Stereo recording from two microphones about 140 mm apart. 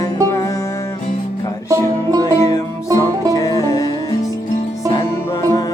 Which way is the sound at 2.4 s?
25° left (ahead or behind).